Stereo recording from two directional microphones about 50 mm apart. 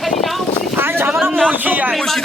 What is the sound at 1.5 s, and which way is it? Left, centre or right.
Speech, right.